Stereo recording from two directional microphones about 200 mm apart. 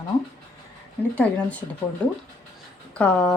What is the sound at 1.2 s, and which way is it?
Speech, 5° left (ahead or behind).